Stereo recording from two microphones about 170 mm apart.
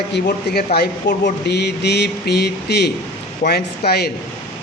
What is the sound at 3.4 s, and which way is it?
Speech, 60° left (ahead or behind).